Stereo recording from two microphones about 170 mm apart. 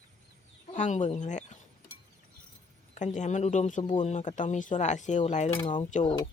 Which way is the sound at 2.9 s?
45° left (ahead or behind).